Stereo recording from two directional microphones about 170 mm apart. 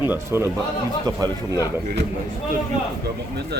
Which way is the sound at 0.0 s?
15° right (ahead or behind).